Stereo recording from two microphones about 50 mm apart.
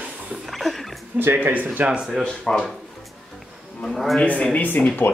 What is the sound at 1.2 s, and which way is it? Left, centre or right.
Speech, right.